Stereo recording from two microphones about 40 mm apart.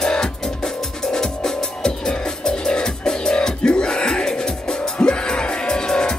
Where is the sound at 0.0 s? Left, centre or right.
Centre.